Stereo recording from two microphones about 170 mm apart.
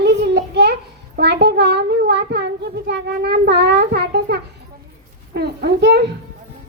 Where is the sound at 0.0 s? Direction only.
75° right (ahead or behind).